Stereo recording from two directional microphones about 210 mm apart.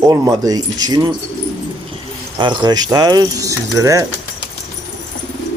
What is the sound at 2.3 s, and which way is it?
Speech, 20° right (ahead or behind).